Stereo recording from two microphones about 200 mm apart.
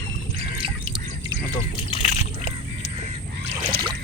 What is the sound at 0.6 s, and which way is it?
Squawk, 25° right (ahead or behind).